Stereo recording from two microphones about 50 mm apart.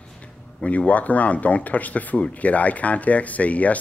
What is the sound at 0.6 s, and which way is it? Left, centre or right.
Speech, left.